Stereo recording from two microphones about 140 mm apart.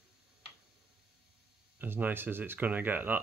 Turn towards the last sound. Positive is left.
turn(degrees=-15)  # may be behind; listen again after turning